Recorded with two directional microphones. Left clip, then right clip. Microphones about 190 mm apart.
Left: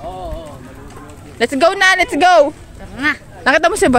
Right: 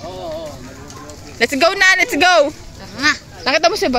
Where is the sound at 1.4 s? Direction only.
20° left (ahead or behind).